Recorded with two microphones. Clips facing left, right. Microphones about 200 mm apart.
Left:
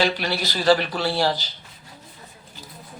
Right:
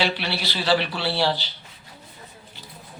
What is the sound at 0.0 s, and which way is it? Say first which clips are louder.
Speech: left 3 dB; 45° left (ahead or behind).